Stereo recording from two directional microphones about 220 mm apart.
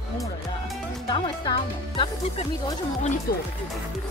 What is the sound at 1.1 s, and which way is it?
Speech, 20° left (ahead or behind).